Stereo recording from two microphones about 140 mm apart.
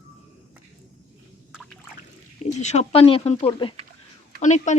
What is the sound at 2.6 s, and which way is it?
Speech, 55° left (ahead or behind).